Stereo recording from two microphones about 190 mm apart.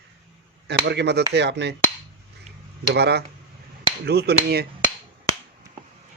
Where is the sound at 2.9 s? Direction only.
60° right (ahead or behind).